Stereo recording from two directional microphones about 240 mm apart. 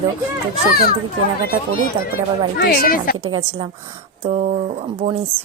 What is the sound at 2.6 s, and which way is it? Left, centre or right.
Speech, left.